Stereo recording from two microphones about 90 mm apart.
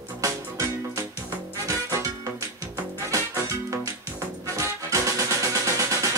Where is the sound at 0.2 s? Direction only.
35° right (ahead or behind).